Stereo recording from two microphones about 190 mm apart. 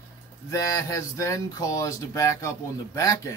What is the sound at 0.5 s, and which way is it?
Speech, 15° left (ahead or behind).